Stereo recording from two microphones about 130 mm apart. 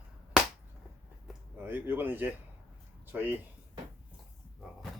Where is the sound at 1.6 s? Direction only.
15° right (ahead or behind).